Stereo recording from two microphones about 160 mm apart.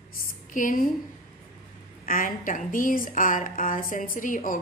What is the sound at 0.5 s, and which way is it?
Speech, 55° left (ahead or behind).